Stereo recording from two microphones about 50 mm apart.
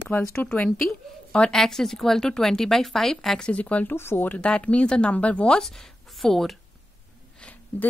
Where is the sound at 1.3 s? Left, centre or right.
Centre.